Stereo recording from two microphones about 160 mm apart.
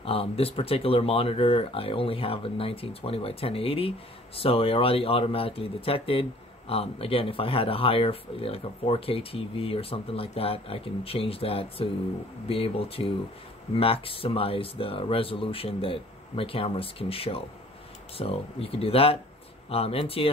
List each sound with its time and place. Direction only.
0.0 s speech: 35° left (ahead or behind)